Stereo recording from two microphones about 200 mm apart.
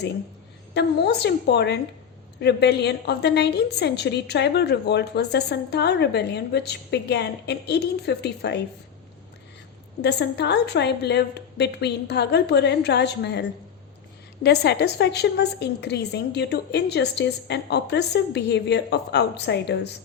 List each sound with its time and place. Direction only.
0.7 s a woman's voice: 55° left (ahead or behind)
10.0 s a woman's voice: 55° left (ahead or behind)
14.4 s a woman's voice: 55° left (ahead or behind)